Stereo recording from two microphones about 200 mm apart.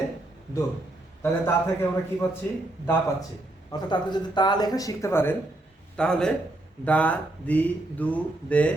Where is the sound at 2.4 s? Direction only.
15° left (ahead or behind).